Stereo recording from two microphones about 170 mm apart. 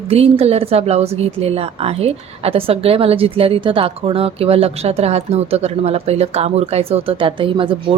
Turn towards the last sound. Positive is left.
turn(degrees=-30)  # may be behind; listen again after turning